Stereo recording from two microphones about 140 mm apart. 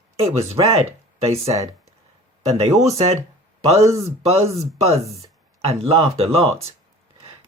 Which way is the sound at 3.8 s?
25° right (ahead or behind).